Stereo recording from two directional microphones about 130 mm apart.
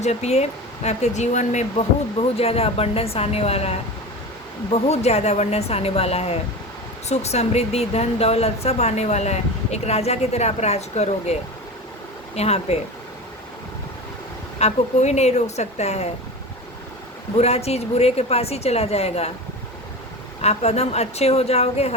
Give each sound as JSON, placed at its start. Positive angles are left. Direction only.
{"t": 0.0, "sound": "speech", "side_deg": 55}
{"t": 2.1, "sound": "a woman's voice", "side_deg": 50}
{"t": 14.6, "sound": "speech", "side_deg": 60}
{"t": 17.3, "sound": "a woman's voice", "side_deg": 55}
{"t": 20.4, "sound": "speech", "side_deg": 55}